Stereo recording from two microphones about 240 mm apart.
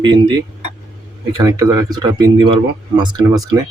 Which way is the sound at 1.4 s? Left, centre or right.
Centre.